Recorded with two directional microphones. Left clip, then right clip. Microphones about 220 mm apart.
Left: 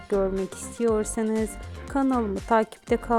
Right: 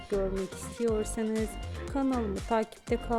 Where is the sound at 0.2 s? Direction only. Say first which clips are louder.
Left 6 dB; 25° left (ahead or behind).